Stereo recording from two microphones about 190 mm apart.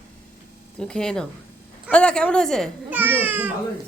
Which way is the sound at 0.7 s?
5° left (ahead or behind).